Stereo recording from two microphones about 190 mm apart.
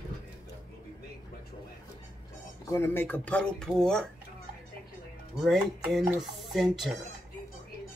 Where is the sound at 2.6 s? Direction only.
15° left (ahead or behind).